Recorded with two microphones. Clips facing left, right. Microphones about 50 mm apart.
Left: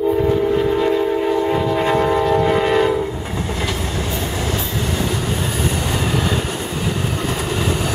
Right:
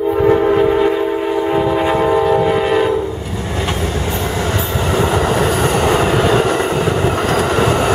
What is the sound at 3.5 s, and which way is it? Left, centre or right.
Train, right.